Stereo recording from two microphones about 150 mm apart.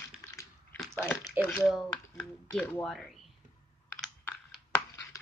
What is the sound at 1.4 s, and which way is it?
Speech, 10° left (ahead or behind).